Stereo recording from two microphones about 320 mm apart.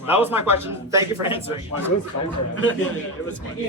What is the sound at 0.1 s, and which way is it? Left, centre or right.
A man's voice, centre.